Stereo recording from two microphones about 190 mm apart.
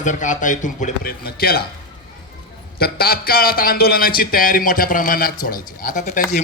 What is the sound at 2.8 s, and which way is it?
A man's voice, 55° left (ahead or behind).